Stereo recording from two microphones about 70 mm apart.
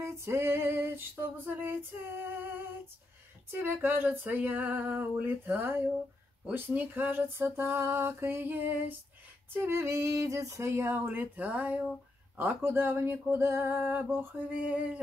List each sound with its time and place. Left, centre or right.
0.0 s female singing: right
9.5 s a sound: right
10.9 s female singing: right